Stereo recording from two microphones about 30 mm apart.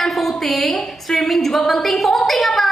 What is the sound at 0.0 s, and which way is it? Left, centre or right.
A woman's voice, centre.